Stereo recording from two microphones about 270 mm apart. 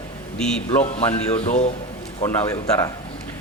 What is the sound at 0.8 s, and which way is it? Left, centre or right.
Speech, left.